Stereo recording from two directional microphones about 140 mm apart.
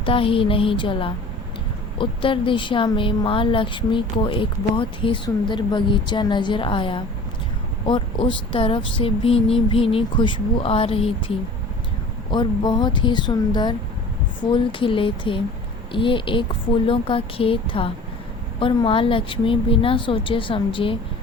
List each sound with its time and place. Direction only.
0.0 s speech: 40° left (ahead or behind)
12.3 s speech: 35° left (ahead or behind)